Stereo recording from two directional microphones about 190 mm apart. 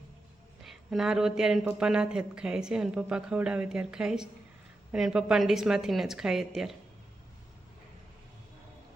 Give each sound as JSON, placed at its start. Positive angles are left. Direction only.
{"t": 0.6, "sound": "speech", "side_deg": 0}